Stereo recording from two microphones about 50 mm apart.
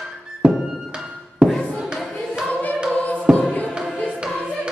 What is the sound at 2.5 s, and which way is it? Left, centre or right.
Choir, left.